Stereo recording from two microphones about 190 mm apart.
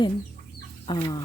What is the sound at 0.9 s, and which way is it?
Speech, 20° left (ahead or behind).